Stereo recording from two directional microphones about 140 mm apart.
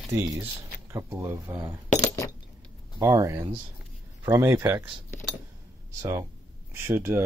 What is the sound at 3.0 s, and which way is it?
Speech, 25° right (ahead or behind).